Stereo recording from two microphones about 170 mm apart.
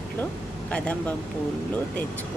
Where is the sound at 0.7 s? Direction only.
5° left (ahead or behind).